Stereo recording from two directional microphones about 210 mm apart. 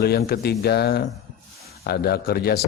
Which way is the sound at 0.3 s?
50° left (ahead or behind).